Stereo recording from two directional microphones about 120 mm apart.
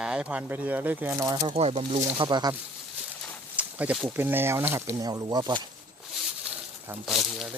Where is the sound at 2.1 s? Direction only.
35° right (ahead or behind).